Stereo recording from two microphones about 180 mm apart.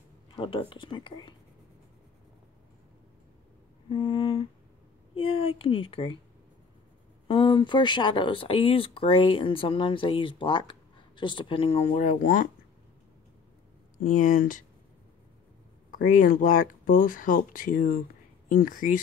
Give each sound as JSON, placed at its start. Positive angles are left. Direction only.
{"t": 0.3, "sound": "speech", "side_deg": 30}
{"t": 3.9, "sound": "a sound", "side_deg": 25}
{"t": 5.1, "sound": "a woman's voice", "side_deg": 30}
{"t": 7.2, "sound": "speech", "side_deg": 25}
{"t": 13.9, "sound": "speech", "side_deg": 45}
{"t": 15.9, "sound": "speech", "side_deg": 50}